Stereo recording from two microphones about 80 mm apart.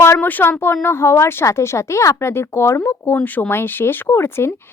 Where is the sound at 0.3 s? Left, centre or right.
Left.